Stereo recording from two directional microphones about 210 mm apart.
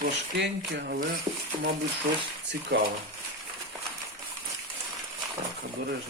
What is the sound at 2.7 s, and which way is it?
Speech, 50° right (ahead or behind).